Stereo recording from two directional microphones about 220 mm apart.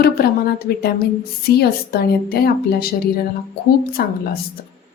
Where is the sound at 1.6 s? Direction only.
45° left (ahead or behind).